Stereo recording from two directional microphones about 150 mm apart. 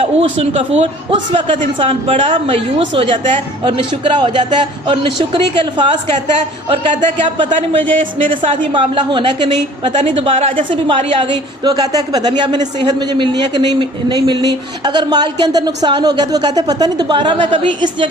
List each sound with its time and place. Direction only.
0.0 s a man's voice: 40° right (ahead or behind)
8.3 s a man's voice: 35° right (ahead or behind)